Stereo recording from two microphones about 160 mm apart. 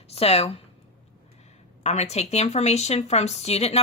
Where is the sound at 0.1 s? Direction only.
40° left (ahead or behind).